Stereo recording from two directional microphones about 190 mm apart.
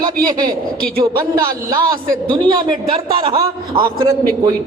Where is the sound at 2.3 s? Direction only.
25° right (ahead or behind).